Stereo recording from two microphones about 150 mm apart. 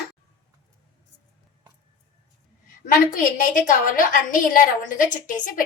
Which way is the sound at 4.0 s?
65° left (ahead or behind).